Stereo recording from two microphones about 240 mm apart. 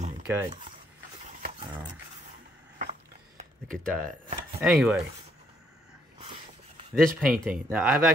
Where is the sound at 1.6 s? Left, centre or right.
Right.